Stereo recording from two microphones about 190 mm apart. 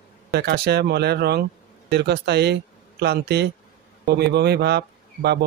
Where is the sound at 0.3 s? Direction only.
60° right (ahead or behind).